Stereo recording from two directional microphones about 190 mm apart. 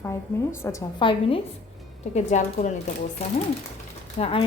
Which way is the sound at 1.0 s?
25° left (ahead or behind).